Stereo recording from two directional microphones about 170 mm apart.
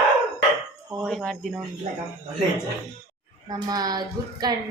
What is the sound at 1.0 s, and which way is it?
Speech, 5° left (ahead or behind).